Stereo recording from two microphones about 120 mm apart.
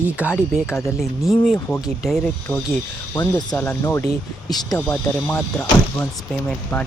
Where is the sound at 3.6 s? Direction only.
20° left (ahead or behind).